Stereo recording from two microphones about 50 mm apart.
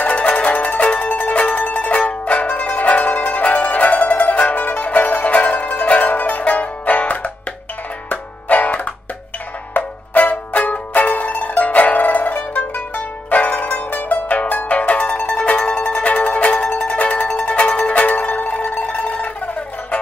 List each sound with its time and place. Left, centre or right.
0.0 s music: left
14.8 s mandolin: left